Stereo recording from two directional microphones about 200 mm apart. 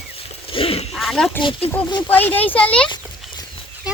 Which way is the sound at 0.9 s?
Centre (ahead or behind).